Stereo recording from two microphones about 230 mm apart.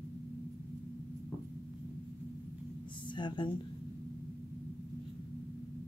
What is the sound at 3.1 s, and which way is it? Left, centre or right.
Speech, centre.